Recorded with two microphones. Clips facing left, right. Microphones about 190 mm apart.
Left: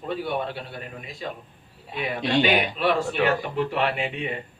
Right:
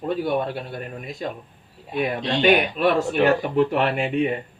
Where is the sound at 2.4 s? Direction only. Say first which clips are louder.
Right 4 dB; 45° right (ahead or behind).